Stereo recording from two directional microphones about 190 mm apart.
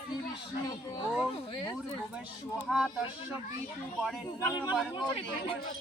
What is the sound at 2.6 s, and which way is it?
Speech, centre (ahead or behind).